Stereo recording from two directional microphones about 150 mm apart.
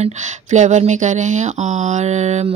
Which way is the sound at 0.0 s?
50° right (ahead or behind).